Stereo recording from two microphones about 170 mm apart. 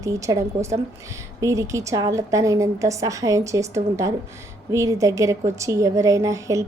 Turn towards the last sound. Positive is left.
turn(degrees=-20)  # may be behind; listen again after turning